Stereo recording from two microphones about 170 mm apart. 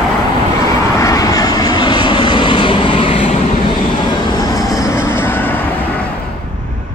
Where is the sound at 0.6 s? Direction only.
20° left (ahead or behind).